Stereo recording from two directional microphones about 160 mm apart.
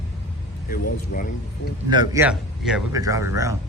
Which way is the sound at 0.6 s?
60° left (ahead or behind).